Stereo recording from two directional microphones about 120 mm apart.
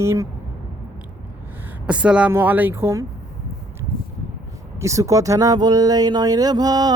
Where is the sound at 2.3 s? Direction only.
15° right (ahead or behind).